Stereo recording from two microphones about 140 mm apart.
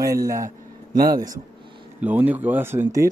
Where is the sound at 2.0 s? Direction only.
10° right (ahead or behind).